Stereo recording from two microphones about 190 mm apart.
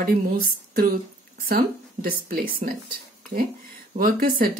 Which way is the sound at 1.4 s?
50° right (ahead or behind).